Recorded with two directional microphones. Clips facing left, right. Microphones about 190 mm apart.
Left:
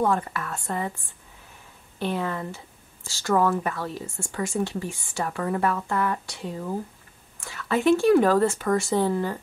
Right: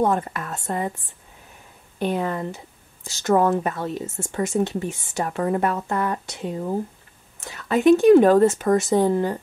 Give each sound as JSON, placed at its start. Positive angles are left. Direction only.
{"t": 0.0, "sound": "speech", "side_deg": -20}